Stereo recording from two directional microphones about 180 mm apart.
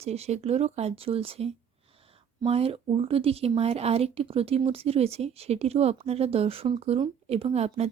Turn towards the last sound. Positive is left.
turn(degrees=-35)  # may be behind; listen again after turning